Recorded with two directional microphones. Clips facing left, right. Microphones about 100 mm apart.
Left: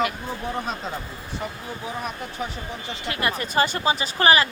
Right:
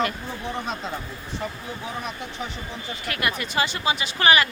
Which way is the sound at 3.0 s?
25° left (ahead or behind).